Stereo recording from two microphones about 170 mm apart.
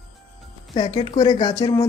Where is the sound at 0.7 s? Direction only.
30° left (ahead or behind).